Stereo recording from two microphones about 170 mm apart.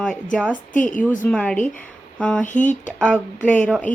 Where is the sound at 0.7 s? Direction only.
50° left (ahead or behind).